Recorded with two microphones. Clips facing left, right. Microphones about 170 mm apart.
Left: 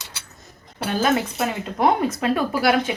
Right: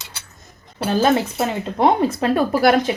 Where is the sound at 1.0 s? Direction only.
30° right (ahead or behind).